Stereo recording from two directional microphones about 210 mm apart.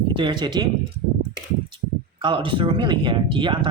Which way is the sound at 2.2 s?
25° right (ahead or behind).